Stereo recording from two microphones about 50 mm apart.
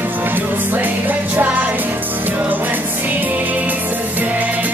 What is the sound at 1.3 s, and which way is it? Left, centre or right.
Music, right.